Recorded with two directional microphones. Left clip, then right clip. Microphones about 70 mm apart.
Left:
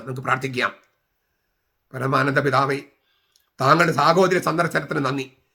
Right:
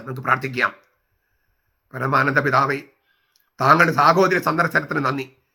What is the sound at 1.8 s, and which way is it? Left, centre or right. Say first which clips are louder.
Speech: right 2 dB; left.